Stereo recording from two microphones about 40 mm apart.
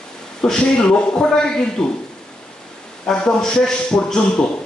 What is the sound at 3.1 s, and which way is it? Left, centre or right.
A man's voice, centre.